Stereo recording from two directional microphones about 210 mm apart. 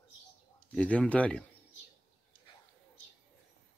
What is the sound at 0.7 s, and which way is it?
Speech, 5° left (ahead or behind).